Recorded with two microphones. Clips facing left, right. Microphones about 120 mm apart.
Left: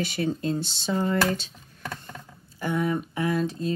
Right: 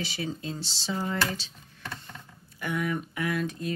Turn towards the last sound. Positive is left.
turn(degrees=30)  # may be behind; listen again after turning